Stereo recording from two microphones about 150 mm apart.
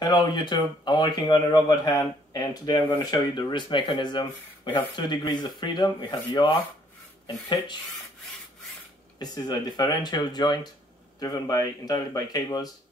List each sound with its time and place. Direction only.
0.0 s speech: 30° left (ahead or behind)
9.2 s speech: 25° left (ahead or behind)